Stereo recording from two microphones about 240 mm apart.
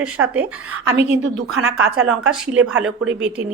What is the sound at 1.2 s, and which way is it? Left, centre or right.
Speech, right.